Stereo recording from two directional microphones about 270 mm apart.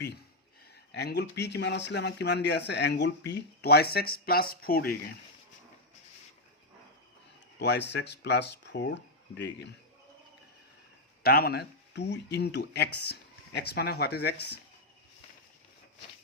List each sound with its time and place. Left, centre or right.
0.9 s speech: left
7.6 s speech: left
11.2 s speech: left